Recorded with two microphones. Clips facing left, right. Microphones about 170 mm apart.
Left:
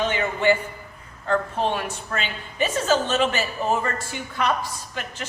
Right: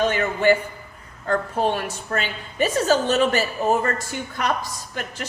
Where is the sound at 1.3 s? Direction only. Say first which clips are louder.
Right 1 dB; 40° right (ahead or behind).